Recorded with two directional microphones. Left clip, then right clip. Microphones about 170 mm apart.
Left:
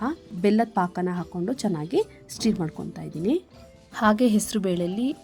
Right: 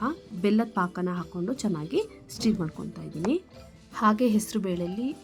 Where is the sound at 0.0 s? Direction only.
20° left (ahead or behind).